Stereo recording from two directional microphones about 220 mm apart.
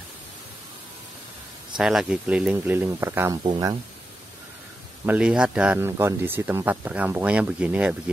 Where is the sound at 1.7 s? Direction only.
5° right (ahead or behind).